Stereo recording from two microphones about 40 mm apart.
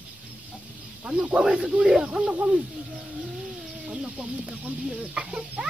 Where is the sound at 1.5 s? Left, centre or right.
Right.